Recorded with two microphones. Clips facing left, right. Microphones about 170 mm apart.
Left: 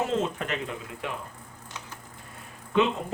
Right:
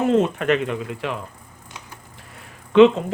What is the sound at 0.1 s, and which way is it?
Speech, 65° right (ahead or behind).